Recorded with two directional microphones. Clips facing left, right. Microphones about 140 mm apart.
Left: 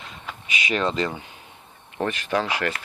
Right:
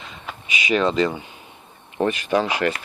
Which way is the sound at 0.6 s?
Centre (ahead or behind).